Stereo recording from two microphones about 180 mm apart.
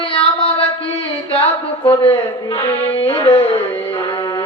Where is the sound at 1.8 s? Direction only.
30° left (ahead or behind).